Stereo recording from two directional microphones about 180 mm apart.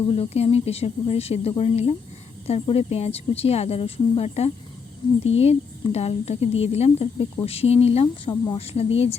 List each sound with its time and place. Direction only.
0.1 s speech: 35° left (ahead or behind)